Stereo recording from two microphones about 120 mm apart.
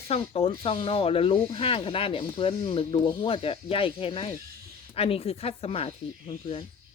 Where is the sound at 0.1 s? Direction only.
55° left (ahead or behind).